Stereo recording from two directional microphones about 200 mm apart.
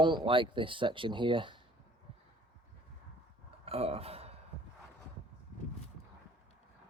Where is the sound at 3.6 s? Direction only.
30° right (ahead or behind).